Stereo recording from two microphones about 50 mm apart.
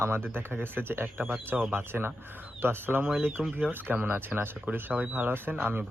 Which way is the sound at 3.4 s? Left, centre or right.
Right.